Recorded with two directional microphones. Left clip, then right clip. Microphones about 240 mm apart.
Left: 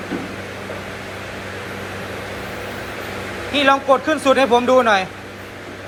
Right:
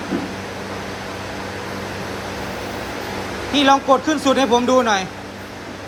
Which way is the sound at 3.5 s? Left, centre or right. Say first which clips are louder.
Even; centre.